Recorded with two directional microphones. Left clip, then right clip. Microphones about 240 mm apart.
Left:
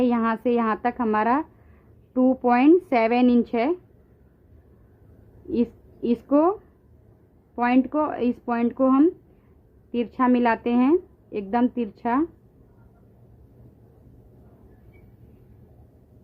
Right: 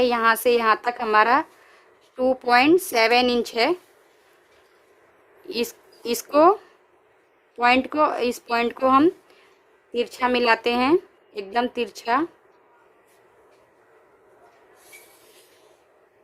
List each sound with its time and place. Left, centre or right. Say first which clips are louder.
0.0 s speech: right 5 dB; centre
5.5 s a woman's voice: left 1 dB; centre
7.6 s speech: right 4 dB; centre